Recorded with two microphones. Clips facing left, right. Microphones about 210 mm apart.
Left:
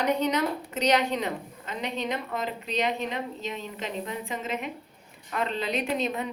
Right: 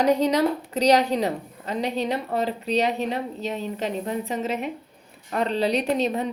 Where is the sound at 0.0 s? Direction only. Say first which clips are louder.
Right 6 dB; 35° right (ahead or behind).